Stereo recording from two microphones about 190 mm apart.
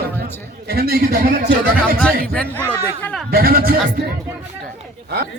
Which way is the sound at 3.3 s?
50° right (ahead or behind).